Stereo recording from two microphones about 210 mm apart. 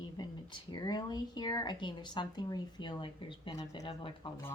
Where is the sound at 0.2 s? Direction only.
20° left (ahead or behind).